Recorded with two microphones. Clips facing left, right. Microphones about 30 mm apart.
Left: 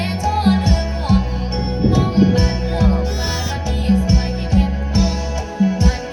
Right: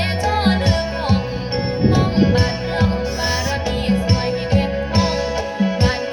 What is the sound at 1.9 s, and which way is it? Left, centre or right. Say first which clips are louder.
Music: left 2 dB; right.